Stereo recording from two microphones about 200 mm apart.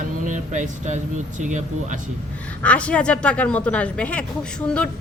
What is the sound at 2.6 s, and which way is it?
A woman's voice, 5° left (ahead or behind).